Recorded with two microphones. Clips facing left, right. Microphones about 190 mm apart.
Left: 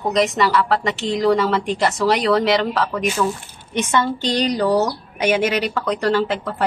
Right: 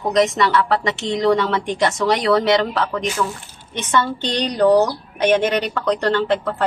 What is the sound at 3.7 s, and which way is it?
Speech, 10° left (ahead or behind).